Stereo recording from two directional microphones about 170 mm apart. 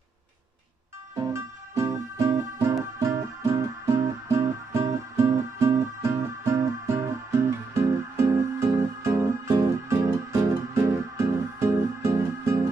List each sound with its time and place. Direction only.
1.1 s music: 20° right (ahead or behind)